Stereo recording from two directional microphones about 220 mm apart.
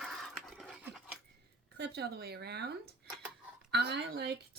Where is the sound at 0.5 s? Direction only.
5° right (ahead or behind).